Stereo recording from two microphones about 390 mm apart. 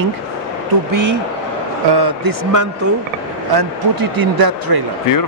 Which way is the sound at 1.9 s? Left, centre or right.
Right.